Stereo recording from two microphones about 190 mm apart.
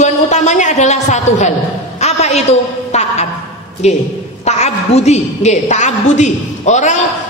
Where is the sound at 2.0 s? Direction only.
35° left (ahead or behind).